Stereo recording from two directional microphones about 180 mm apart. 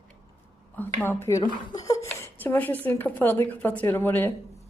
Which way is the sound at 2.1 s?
10° left (ahead or behind).